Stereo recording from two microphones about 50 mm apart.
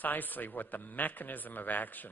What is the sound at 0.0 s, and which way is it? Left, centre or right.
Speech, left.